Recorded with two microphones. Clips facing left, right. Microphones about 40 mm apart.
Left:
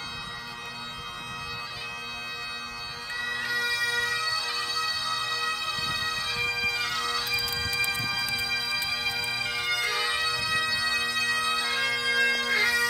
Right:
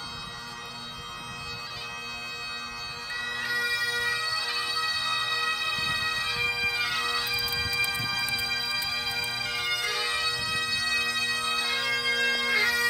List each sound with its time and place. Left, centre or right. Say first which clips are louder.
3.2 s bagpipes: left 1 dB; centre
7.7 s music: left 1 dB; left
9.2 s bagpipes: left 1 dB; centre